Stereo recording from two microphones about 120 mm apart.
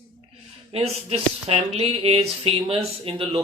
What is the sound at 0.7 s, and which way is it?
Speech, 60° right (ahead or behind).